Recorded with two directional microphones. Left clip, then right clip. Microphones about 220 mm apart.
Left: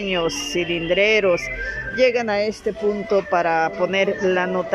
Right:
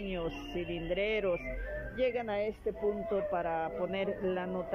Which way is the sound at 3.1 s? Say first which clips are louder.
Left 14 dB; 15° left (ahead or behind).